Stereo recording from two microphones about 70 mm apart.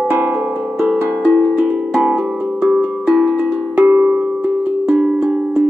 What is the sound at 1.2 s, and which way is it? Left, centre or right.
Music, centre.